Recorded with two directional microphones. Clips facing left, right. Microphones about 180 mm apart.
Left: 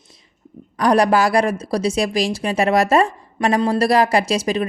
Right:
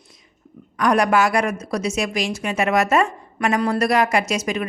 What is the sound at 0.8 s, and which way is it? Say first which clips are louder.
A woman's voice: left 2 dB; 30° left (ahead or behind).